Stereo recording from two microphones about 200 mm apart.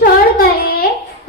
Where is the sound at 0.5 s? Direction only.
45° left (ahead or behind).